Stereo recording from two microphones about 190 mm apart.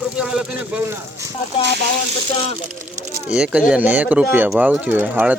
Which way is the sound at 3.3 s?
5° right (ahead or behind).